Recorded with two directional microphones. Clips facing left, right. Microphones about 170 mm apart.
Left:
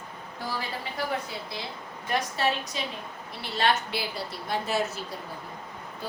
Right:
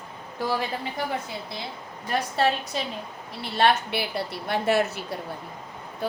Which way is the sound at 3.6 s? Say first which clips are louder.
Right 4 dB; 65° right (ahead or behind).